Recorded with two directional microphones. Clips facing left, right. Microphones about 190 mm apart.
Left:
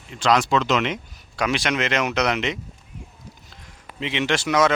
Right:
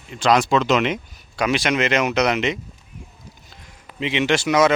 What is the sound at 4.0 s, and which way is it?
Speech, 5° right (ahead or behind).